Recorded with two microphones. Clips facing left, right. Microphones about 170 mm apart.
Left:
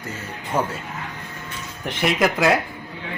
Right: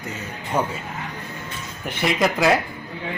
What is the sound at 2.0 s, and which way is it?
Speech, centre (ahead or behind).